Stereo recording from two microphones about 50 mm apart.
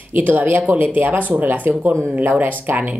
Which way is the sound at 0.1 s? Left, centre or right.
Right.